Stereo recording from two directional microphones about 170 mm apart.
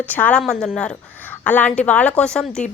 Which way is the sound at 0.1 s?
10° left (ahead or behind).